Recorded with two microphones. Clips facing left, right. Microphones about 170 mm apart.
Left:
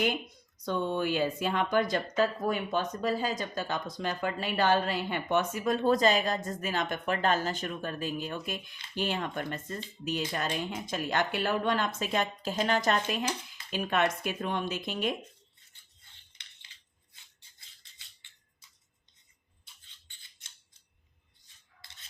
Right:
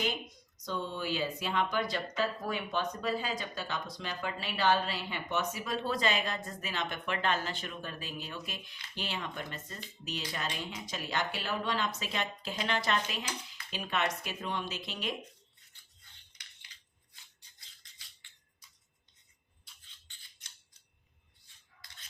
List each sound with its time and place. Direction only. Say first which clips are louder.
0.5 s speech: left 7 dB; 55° left (ahead or behind)